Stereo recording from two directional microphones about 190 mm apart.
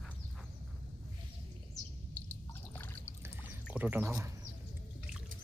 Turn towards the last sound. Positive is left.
turn(degrees=-15)  # may be behind; listen again after turning